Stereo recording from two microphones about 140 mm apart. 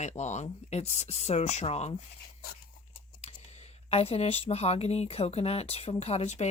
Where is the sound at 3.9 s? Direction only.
45° left (ahead or behind).